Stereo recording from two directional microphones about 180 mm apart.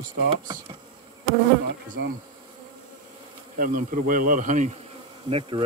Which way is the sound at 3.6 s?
50° right (ahead or behind).